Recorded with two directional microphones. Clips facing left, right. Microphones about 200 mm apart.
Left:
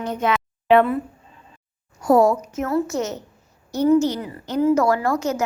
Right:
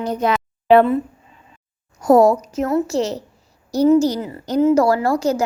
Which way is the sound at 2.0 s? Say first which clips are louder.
Right 3 dB; 40° right (ahead or behind).